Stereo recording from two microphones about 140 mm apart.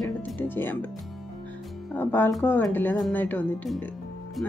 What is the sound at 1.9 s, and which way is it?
Speech, 15° left (ahead or behind).